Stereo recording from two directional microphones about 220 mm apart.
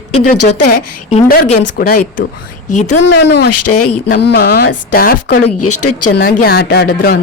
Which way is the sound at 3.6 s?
90° left.